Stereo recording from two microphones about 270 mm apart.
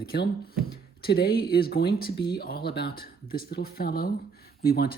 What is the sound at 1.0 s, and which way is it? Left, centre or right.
Speech, left.